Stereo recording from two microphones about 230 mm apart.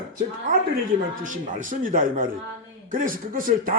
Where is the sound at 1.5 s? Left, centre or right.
Right.